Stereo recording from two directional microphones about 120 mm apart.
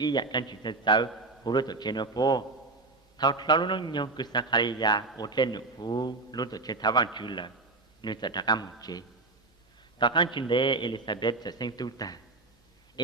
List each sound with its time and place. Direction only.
0.0 s a man's voice: 35° left (ahead or behind)